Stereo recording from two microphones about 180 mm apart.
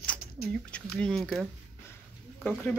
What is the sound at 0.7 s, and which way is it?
Speech, 5° left (ahead or behind).